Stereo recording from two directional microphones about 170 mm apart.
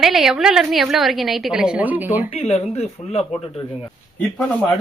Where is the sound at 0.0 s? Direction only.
Centre (ahead or behind).